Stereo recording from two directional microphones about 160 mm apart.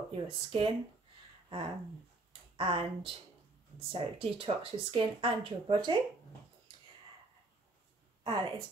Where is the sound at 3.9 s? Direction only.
35° right (ahead or behind).